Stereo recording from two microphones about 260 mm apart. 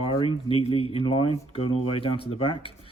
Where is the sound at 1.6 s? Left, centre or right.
Left.